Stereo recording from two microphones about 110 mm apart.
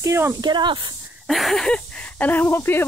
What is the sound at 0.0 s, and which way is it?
Speech, 25° right (ahead or behind).